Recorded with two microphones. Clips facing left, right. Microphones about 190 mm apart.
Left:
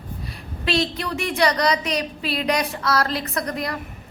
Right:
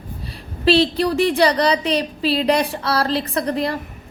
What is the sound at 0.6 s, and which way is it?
A woman's voice, 30° right (ahead or behind).